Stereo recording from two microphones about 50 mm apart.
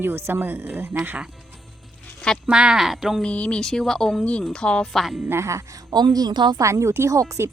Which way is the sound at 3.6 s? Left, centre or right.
Centre.